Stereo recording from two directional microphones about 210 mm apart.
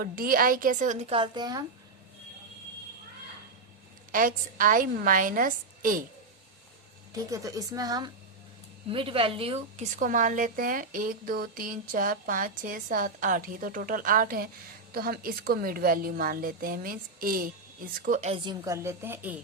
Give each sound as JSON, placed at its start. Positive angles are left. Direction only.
{"t": 0.0, "sound": "a woman's voice", "side_deg": -45}
{"t": 1.2, "sound": "speech", "side_deg": -20}
{"t": 4.1, "sound": "a woman's voice", "side_deg": -40}
{"t": 7.1, "sound": "a woman's voice", "side_deg": -15}
{"t": 18.6, "sound": "a woman's voice", "side_deg": -15}